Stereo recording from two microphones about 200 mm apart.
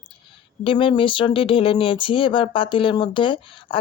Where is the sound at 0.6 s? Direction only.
25° left (ahead or behind).